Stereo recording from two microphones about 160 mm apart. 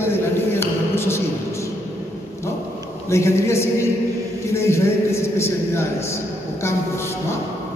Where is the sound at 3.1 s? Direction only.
15° left (ahead or behind).